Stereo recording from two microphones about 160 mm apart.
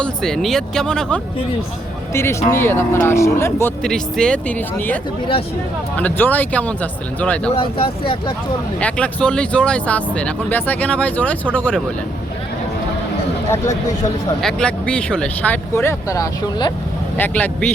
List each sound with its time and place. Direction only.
0.0 s speech: 5° left (ahead or behind)
2.5 s speech: 15° left (ahead or behind)
3.8 s speech: 5° left (ahead or behind)
6.0 s speech: 10° left (ahead or behind)
7.5 s speech: 35° left (ahead or behind)
8.8 s speech: 5° left (ahead or behind)
14.4 s speech: 5° left (ahead or behind); by 16.7 s 25° left (ahead or behind)
17.2 s speech: 10° left (ahead or behind)